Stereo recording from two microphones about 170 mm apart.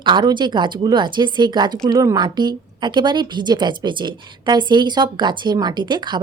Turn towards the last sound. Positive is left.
turn(degrees=-25)  # may be behind; listen again after turning